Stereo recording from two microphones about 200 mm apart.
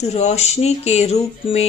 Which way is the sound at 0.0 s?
35° left (ahead or behind).